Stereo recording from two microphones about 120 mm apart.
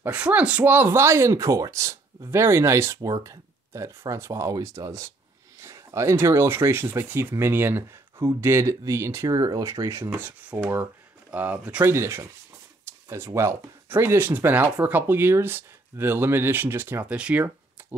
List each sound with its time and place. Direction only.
0.0 s speech: 15° right (ahead or behind)
11.9 s speech: 20° right (ahead or behind)